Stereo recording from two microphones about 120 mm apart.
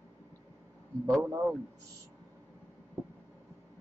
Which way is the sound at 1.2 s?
20° right (ahead or behind).